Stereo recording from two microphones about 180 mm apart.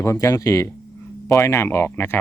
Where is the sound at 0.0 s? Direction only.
15° left (ahead or behind).